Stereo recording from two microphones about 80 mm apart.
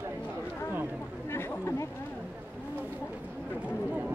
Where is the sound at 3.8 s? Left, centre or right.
Centre.